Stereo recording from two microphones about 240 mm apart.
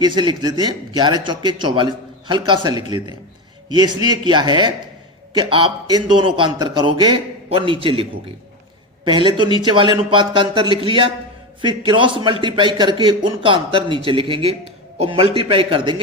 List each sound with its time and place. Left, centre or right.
0.0 s a man's voice: centre
4.0 s a man's voice: centre
9.0 s a man's voice: centre